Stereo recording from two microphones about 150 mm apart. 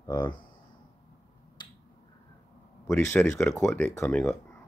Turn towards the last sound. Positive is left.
turn(degrees=15)  # may be behind; listen again after turning